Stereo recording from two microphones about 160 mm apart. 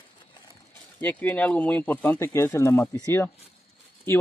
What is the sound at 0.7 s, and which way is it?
Speech, 10° left (ahead or behind).